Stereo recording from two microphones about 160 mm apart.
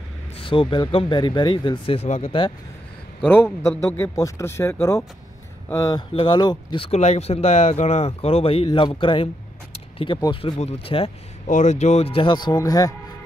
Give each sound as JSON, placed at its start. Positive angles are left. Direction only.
{"t": 0.4, "sound": "speech", "side_deg": 35}
{"t": 3.3, "sound": "a man's voice", "side_deg": 15}
{"t": 11.4, "sound": "speech", "side_deg": 50}